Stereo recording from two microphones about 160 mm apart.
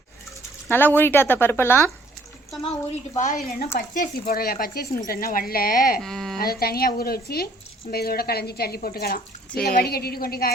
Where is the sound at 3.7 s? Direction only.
55° left (ahead or behind).